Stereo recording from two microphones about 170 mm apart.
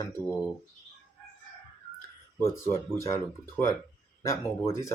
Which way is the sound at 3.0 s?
15° left (ahead or behind).